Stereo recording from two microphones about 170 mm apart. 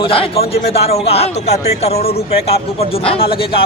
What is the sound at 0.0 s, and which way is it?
A man's voice, 35° left (ahead or behind).